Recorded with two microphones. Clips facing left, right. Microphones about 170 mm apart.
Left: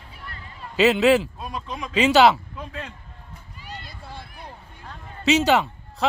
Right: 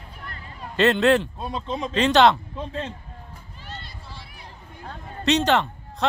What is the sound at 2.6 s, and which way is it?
Speech, 25° right (ahead or behind).